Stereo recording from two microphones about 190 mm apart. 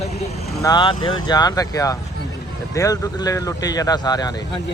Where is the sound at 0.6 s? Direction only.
25° left (ahead or behind).